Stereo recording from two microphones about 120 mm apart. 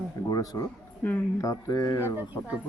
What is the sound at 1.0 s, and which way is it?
Speech, 15° left (ahead or behind).